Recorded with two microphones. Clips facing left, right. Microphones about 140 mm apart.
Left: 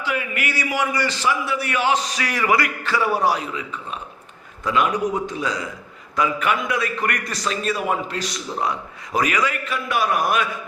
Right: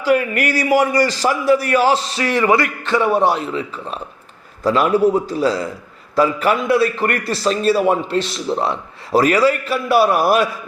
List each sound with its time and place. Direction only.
0.0 s a man's voice: 40° right (ahead or behind)